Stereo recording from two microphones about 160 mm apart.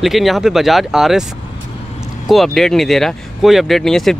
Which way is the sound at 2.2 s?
Centre (ahead or behind).